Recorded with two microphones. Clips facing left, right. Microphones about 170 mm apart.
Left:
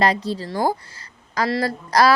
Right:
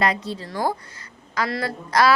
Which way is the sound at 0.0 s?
35° left (ahead or behind).